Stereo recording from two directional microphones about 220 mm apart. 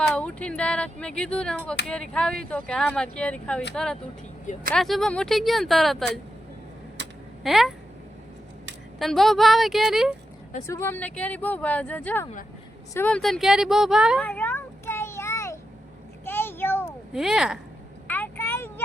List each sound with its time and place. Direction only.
0.0 s speech: 5° left (ahead or behind)
4.7 s speech: centre (ahead or behind)
7.4 s speech: centre (ahead or behind)
9.0 s speech: centre (ahead or behind)
10.7 s speech: 10° left (ahead or behind)
14.3 s a sound: 10° left (ahead or behind)
17.2 s speech: centre (ahead or behind)
18.1 s vehicle: 10° left (ahead or behind)